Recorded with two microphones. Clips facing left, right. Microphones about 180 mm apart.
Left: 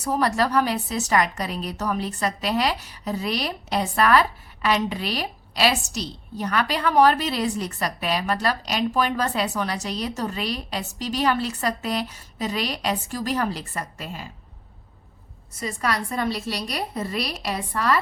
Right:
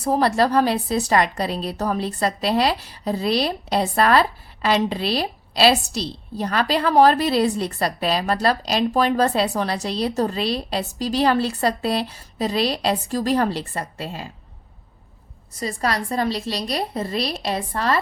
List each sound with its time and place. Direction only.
0.0 s a woman's voice: 30° right (ahead or behind)
15.5 s a woman's voice: 35° right (ahead or behind)